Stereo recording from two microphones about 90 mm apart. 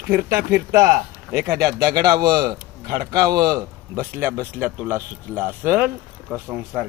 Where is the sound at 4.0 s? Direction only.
25° right (ahead or behind).